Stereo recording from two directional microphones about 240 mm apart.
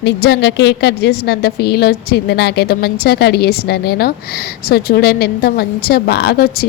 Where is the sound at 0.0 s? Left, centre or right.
Left.